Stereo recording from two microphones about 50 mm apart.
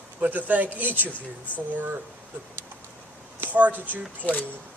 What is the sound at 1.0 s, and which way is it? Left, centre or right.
Speech, left.